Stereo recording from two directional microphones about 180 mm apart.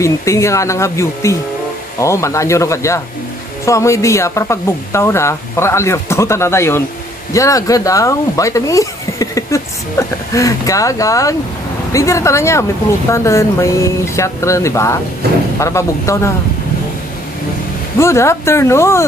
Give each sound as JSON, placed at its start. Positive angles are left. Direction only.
{"t": 0.0, "sound": "speech", "side_deg": 15}
{"t": 17.9, "sound": "speech", "side_deg": 15}